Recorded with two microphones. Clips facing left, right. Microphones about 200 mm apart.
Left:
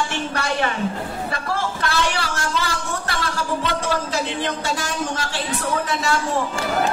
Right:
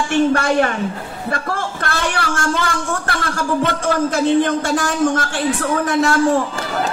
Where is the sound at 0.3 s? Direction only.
50° right (ahead or behind).